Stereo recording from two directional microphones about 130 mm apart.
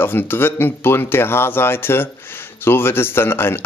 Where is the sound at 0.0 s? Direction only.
15° left (ahead or behind).